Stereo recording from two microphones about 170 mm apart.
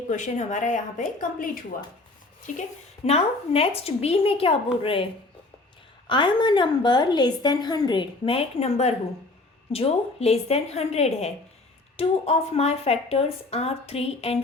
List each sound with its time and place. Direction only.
0.1 s speech: 45° left (ahead or behind)
2.6 s speech: 40° left (ahead or behind)
6.1 s a woman's voice: 30° left (ahead or behind)